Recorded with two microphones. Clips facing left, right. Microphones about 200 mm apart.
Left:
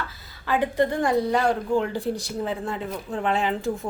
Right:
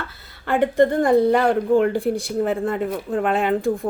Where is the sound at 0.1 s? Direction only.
65° right (ahead or behind).